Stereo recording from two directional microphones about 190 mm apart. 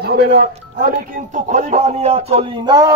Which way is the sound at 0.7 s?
50° right (ahead or behind).